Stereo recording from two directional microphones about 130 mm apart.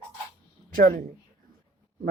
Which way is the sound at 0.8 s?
90° right.